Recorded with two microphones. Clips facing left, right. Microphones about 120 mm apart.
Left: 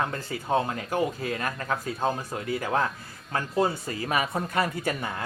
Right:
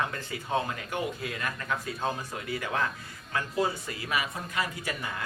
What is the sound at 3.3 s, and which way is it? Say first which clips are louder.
Speech: left 3 dB; 35° left (ahead or behind).